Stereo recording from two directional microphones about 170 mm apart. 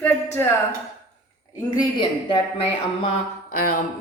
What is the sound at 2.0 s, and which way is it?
Speech, 25° left (ahead or behind).